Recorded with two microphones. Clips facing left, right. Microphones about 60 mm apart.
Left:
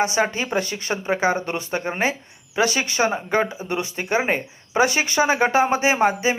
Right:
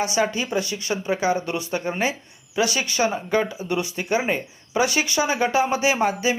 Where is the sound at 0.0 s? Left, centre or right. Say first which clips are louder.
Left 2 dB; left.